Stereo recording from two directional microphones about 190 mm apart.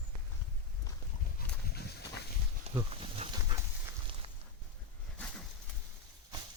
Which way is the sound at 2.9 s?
30° right (ahead or behind).